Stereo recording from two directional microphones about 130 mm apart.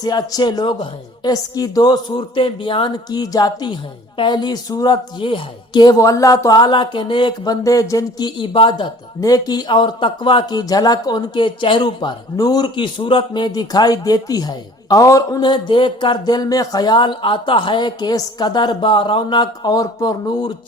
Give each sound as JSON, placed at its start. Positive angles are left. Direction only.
{"t": 0.0, "sound": "speech", "side_deg": 30}
{"t": 8.4, "sound": "speech", "side_deg": 40}
{"t": 9.2, "sound": "speech", "side_deg": 30}